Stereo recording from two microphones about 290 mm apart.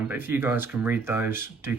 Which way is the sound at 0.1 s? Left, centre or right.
Centre.